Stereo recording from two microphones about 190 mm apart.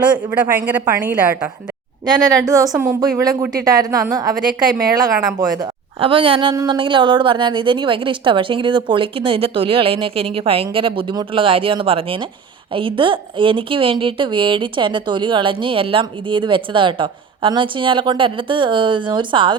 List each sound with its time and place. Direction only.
0.0 s a woman's voice: 5° right (ahead or behind)
2.7 s a woman's voice: 10° right (ahead or behind)